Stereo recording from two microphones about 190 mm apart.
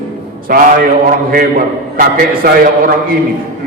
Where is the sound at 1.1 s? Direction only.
50° right (ahead or behind).